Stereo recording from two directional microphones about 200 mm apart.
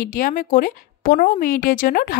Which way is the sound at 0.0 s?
45° left (ahead or behind).